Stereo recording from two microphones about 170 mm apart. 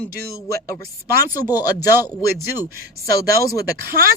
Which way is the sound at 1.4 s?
25° left (ahead or behind).